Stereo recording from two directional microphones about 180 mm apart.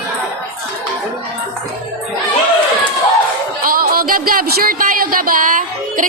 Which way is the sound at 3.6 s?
55° right (ahead or behind).